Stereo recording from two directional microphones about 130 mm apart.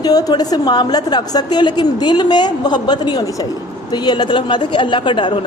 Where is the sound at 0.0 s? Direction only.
30° left (ahead or behind).